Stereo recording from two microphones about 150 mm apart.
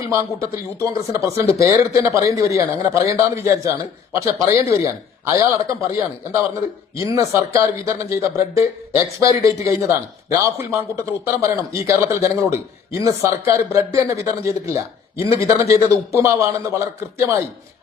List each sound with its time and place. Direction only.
0.1 s speech: 15° right (ahead or behind)